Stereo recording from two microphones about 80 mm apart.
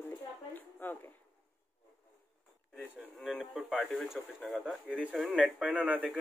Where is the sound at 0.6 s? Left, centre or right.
Left.